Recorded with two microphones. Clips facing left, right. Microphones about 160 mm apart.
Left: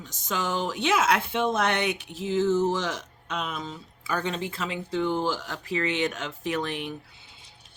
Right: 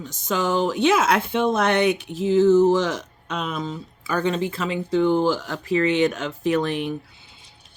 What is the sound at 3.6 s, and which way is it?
Speech, 55° right (ahead or behind).